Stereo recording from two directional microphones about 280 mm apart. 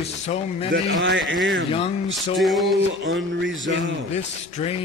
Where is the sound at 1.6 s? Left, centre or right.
Centre.